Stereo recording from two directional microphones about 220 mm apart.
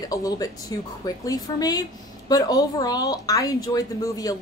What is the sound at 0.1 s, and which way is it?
Speech, 15° left (ahead or behind).